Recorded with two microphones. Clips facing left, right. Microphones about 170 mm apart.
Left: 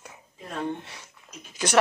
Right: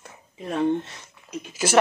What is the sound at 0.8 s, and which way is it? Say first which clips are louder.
Speech: right 8 dB; 10° left (ahead or behind).